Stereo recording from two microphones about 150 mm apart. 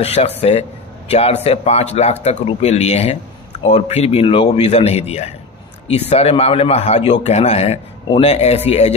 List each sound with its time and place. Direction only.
0.0 s a man's voice: 45° left (ahead or behind)